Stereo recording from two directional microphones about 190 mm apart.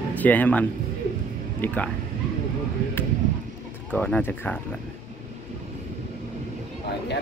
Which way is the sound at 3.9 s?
10° left (ahead or behind).